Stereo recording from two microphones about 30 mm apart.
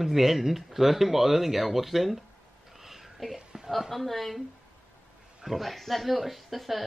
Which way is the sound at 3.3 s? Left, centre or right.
Centre.